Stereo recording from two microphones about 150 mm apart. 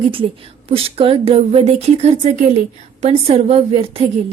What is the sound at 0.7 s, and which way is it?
A woman's voice, 40° right (ahead or behind).